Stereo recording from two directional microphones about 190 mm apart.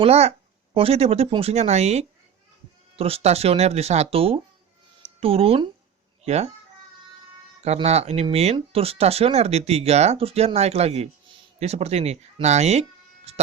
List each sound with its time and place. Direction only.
0.0 s speech: 35° right (ahead or behind)
7.6 s speech: 35° right (ahead or behind)
13.3 s a sound: 35° right (ahead or behind)